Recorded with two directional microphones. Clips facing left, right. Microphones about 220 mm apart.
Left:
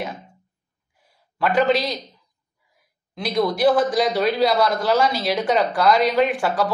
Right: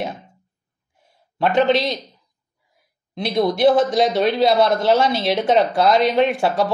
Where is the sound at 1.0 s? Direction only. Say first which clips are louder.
Right 2 dB; 25° right (ahead or behind).